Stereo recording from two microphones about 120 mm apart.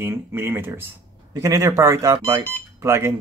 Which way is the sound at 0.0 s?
20° right (ahead or behind).